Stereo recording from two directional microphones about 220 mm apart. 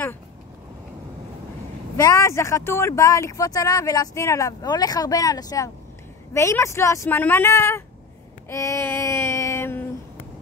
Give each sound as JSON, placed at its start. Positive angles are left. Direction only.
{"t": 2.0, "sound": "speech", "side_deg": 15}
{"t": 8.5, "sound": "child singing", "side_deg": 15}